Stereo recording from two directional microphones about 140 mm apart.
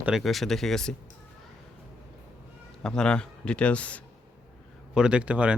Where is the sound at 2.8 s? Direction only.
5° left (ahead or behind).